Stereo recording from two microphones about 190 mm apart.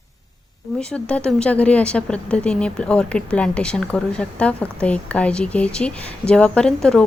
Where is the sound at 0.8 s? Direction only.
5° left (ahead or behind).